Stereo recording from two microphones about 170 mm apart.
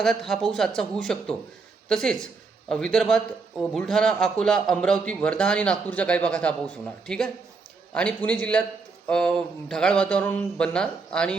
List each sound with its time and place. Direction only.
0.0 s a man's voice: centre (ahead or behind)